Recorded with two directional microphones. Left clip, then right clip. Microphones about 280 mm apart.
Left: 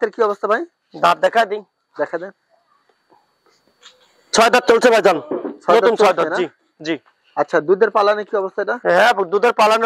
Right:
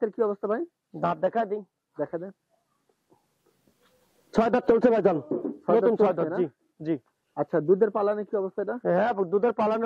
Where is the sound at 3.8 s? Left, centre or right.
Centre.